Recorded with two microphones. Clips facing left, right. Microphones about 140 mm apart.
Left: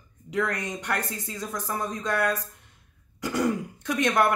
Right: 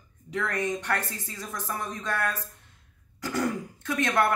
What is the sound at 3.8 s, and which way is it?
Speech, 15° left (ahead or behind).